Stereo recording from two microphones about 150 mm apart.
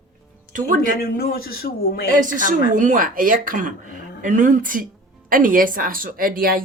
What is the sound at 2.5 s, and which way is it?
A woman's voice, 60° right (ahead or behind).